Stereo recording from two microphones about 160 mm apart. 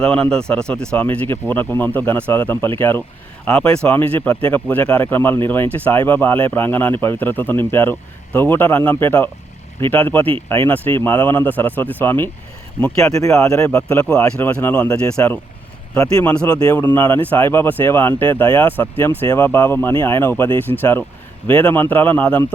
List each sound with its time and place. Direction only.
0.0 s speech: 5° left (ahead or behind)
16.0 s speech: 20° left (ahead or behind)
16.3 s speech: 5° left (ahead or behind); by 20.8 s 20° left (ahead or behind)
21.4 s speech: 10° left (ahead or behind)